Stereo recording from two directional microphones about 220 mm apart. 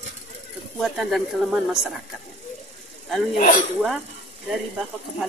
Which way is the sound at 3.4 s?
35° left (ahead or behind).